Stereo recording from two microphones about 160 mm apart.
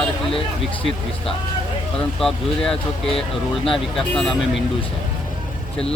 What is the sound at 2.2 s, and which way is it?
Speech, 5° left (ahead or behind).